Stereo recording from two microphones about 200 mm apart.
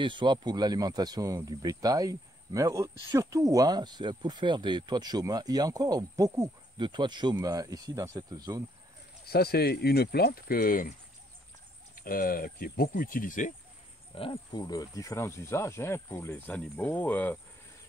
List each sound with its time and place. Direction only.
0.0 s speech: 25° right (ahead or behind)
9.2 s speech: 50° left (ahead or behind)
11.9 s speech: 45° left (ahead or behind)
14.1 s speech: 25° left (ahead or behind); by 17.4 s 10° left (ahead or behind)